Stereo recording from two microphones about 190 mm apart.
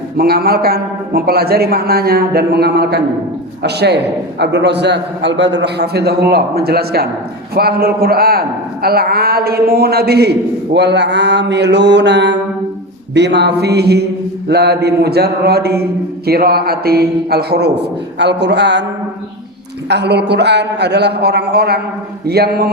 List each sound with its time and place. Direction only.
0.2 s a man's voice: 55° right (ahead or behind)
19.9 s speech: 60° right (ahead or behind)